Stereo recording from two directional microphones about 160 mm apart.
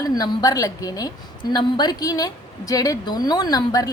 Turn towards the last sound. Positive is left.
turn(degrees=25)  # may be behind; listen again after turning